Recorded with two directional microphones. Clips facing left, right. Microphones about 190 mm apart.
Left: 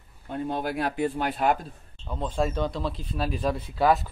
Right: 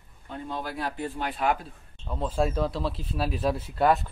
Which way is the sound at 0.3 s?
55° left (ahead or behind).